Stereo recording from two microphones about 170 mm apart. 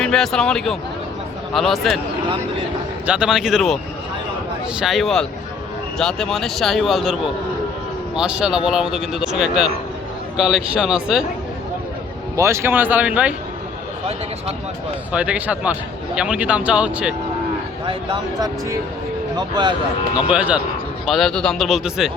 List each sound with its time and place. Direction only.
0.0 s speech: 5° left (ahead or behind)
3.1 s speech: 5° right (ahead or behind)
4.8 s speech: centre (ahead or behind)
12.4 s speech: 15° right (ahead or behind)
15.1 s speech: 5° right (ahead or behind)
17.8 s speech: 25° right (ahead or behind)
20.3 s speech: 5° right (ahead or behind)